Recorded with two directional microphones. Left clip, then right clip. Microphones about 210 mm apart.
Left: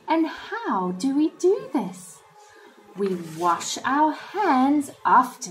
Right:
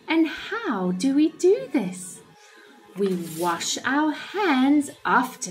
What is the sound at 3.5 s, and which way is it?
A woman's voice, 10° right (ahead or behind).